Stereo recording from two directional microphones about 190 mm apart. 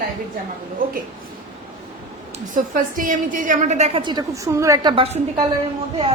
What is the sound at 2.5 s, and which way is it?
A woman's voice, 45° right (ahead or behind).